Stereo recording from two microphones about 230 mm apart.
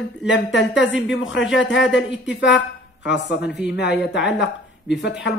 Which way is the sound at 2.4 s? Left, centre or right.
Left.